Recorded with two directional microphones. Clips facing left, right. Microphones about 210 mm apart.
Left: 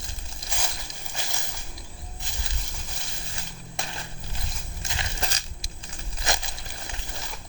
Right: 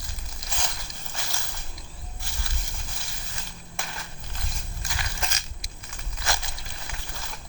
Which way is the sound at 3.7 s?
25° left (ahead or behind).